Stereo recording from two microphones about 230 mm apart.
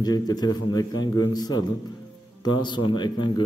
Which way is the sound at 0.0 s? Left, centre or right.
Centre.